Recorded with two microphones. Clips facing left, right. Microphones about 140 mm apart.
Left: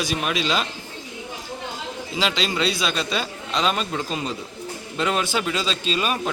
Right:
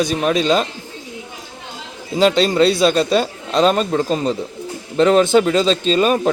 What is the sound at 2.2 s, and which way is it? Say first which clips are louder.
Speech: right 11 dB; 40° right (ahead or behind).